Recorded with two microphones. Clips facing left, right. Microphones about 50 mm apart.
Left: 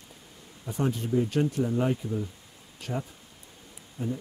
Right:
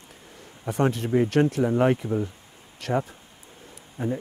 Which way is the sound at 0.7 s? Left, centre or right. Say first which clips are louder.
Right 5 dB; right.